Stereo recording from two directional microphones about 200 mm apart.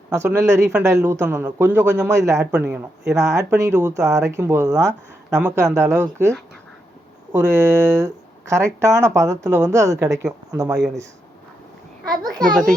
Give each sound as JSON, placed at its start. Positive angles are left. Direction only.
{"t": 0.1, "sound": "speech", "side_deg": -15}
{"t": 7.3, "sound": "speech", "side_deg": -15}
{"t": 12.0, "sound": "a child's voice", "side_deg": -20}